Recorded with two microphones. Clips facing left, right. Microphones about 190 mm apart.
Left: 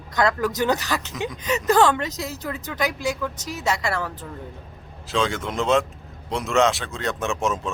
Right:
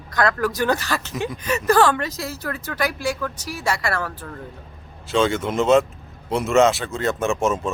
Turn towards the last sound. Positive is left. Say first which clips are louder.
# right 4 dB
turn(degrees=0)  # may be behind; listen again after turning